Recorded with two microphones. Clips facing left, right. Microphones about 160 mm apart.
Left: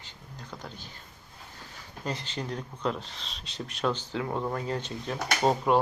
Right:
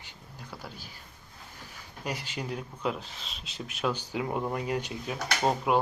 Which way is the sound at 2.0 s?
10° right (ahead or behind).